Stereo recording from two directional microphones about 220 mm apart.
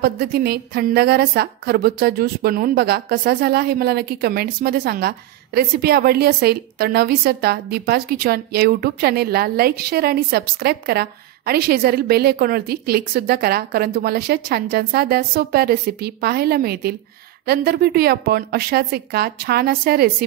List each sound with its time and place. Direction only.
0.0 s a woman's voice: 45° right (ahead or behind)